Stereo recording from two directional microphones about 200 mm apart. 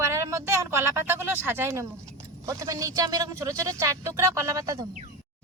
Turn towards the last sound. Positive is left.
turn(degrees=-15)  # may be behind; listen again after turning